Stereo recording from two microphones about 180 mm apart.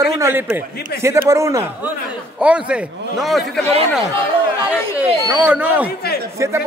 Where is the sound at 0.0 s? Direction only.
20° right (ahead or behind); by 3.6 s centre (ahead or behind).